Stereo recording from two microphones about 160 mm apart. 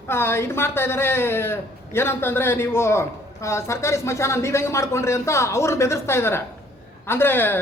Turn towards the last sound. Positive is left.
turn(degrees=15)  # may be behind; listen again after turning